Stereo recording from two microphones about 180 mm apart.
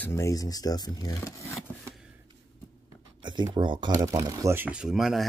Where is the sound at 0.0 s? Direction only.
15° left (ahead or behind).